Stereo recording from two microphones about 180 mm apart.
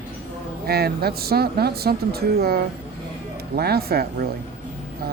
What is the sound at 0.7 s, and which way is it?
Speech, 60° right (ahead or behind).